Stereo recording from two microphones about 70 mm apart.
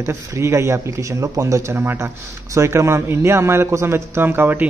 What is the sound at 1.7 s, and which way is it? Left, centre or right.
Speech, right.